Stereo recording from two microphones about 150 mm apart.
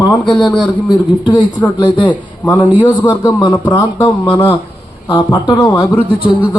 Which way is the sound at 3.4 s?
30° left (ahead or behind).